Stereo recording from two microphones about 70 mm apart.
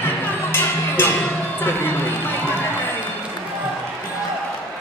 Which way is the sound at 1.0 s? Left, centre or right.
Left.